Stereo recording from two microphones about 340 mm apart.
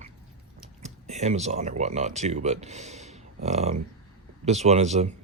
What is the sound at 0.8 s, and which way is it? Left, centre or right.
Speech, centre.